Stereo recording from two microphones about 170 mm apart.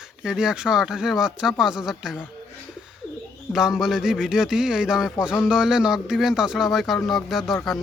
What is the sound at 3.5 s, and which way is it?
Speech, 5° right (ahead or behind).